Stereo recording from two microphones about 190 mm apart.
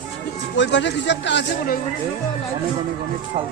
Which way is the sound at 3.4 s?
30° right (ahead or behind).